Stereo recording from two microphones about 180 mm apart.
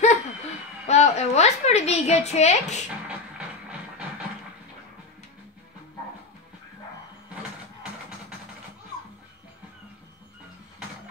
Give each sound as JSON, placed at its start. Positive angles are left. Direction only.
{"t": 0.8, "sound": "a woman's voice", "side_deg": 40}
{"t": 2.9, "sound": "music", "side_deg": -5}